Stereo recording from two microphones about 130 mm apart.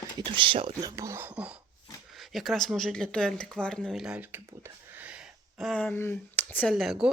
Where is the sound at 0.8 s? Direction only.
25° right (ahead or behind).